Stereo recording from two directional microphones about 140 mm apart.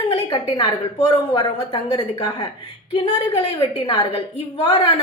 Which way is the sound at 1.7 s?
45° left (ahead or behind).